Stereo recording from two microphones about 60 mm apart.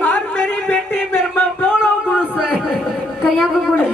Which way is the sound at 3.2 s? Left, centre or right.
Centre.